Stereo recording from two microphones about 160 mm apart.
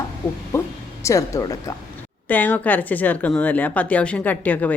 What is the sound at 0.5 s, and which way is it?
A woman's voice, 15° left (ahead or behind).